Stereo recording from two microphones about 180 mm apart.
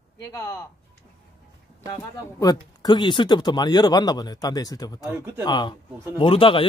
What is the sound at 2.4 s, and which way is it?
Speech, 25° left (ahead or behind).